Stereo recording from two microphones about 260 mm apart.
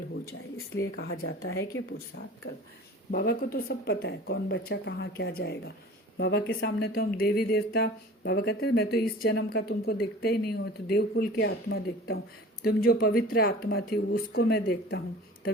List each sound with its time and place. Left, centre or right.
1.1 s speech: left
3.1 s speech: left